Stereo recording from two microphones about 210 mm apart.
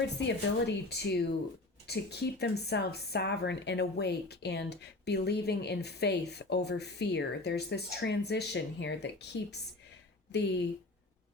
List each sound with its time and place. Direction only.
0.2 s speech: 50° left (ahead or behind)